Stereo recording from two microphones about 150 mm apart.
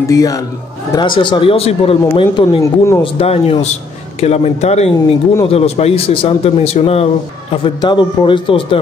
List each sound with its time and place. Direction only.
0.0 s a man's voice: 25° left (ahead or behind); by 2.2 s 40° left (ahead or behind)
2.6 s speech: 20° left (ahead or behind)
3.0 s a man's voice: 40° left (ahead or behind)
4.9 s speech: 20° left (ahead or behind)
5.5 s a man's voice: 45° left (ahead or behind)
7.6 s a man's voice: 30° left (ahead or behind)